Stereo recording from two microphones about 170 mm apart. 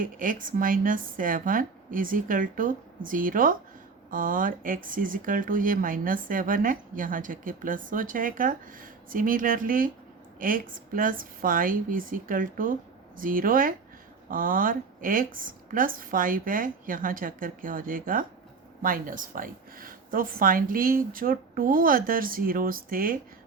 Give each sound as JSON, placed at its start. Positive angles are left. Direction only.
{"t": 0.0, "sound": "speech", "side_deg": -55}